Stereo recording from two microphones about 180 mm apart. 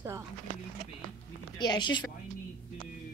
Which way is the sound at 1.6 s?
25° left (ahead or behind).